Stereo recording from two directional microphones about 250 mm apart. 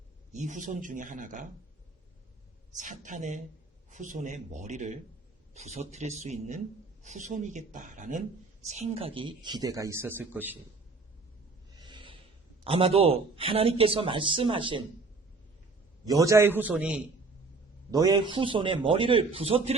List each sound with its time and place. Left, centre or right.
0.3 s a man's voice: right
2.7 s speech: right; by 10.6 s centre
11.8 s a sound: centre
12.6 s speech: right
16.0 s speech: centre
17.9 s speech: centre